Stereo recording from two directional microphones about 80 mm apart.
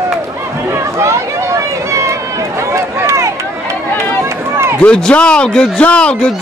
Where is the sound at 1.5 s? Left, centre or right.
Right.